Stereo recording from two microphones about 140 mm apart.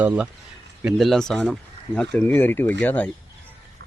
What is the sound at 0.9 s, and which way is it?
Speech, centre (ahead or behind).